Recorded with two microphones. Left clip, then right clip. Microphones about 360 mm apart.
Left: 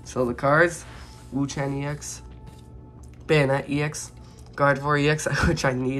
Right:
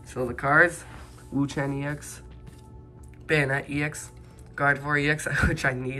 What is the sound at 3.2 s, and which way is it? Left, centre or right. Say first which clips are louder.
Speech: left 3 dB; centre.